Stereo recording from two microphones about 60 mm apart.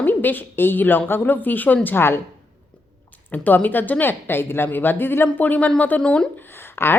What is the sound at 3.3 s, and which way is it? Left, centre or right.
Speech, left.